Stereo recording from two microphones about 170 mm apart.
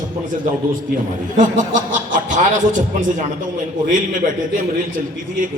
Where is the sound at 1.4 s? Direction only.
50° right (ahead or behind).